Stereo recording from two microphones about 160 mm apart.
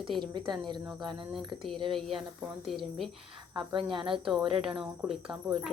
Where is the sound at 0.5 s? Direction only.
30° right (ahead or behind).